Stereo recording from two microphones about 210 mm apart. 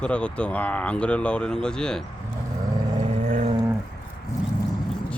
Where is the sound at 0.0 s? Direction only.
5° left (ahead or behind).